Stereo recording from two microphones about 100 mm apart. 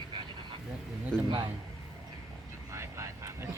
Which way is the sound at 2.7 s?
30° right (ahead or behind).